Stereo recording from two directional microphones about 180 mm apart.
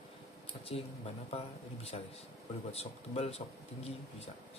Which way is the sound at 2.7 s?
35° left (ahead or behind).